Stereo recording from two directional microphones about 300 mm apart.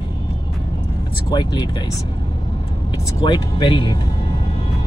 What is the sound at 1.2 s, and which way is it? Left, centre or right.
Speech, centre.